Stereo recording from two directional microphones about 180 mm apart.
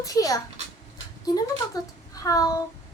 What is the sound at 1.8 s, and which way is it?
Speech, 20° left (ahead or behind).